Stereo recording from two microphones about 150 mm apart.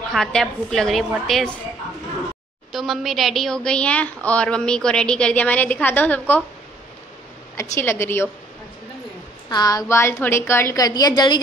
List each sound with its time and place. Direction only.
0.1 s a woman's voice: 5° left (ahead or behind)
2.7 s a woman's voice: centre (ahead or behind)
7.7 s a woman's voice: 15° left (ahead or behind)
9.5 s a woman's voice: 25° left (ahead or behind)
10.9 s a woman's voice: 25° left (ahead or behind)